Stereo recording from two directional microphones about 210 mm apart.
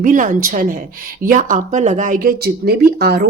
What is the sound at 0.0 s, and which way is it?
Speech, 40° right (ahead or behind).